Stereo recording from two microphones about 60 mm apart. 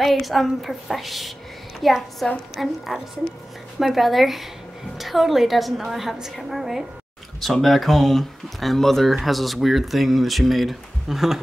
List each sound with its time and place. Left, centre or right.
0.0 s speech: centre